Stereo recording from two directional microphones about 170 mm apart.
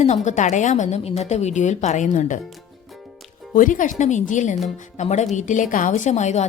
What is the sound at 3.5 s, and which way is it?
A woman's voice, 50° left (ahead or behind).